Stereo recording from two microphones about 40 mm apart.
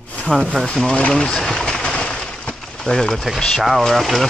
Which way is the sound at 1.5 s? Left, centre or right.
Centre.